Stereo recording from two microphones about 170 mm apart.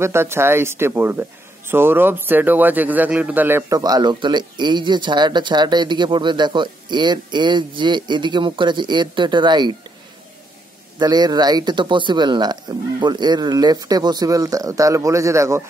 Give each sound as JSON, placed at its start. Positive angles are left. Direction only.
{"t": 0.0, "sound": "a man's voice", "side_deg": -15}
{"t": 11.0, "sound": "a man's voice", "side_deg": -25}